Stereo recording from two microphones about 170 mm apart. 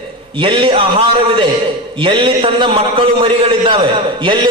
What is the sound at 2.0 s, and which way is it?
A man's voice, 30° right (ahead or behind).